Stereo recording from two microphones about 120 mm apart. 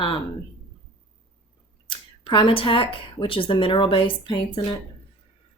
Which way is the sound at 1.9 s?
40° left (ahead or behind).